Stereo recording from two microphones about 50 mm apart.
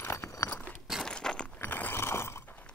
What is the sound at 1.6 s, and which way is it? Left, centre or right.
Mechanisms, left.